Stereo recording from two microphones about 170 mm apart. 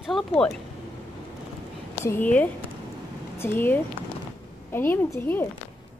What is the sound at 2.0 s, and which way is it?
A woman's voice, 10° left (ahead or behind).